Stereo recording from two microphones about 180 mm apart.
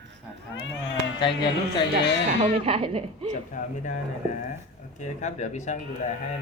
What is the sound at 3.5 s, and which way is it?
Speech, 45° left (ahead or behind).